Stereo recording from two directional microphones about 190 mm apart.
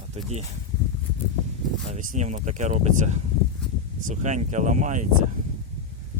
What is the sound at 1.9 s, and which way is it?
Speech, 40° right (ahead or behind).